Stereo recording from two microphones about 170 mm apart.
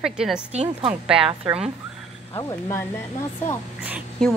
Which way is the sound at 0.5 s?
35° right (ahead or behind).